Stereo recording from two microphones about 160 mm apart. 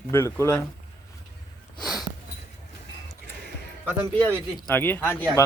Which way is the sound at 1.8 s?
Centre (ahead or behind).